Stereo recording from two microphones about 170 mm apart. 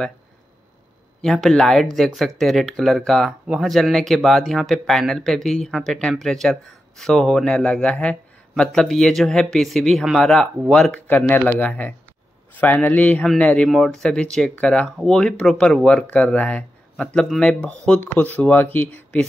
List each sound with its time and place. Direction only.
1.2 s speech: 5° left (ahead or behind)